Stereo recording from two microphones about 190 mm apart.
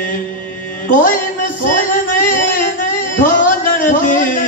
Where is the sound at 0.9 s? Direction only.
45° left (ahead or behind).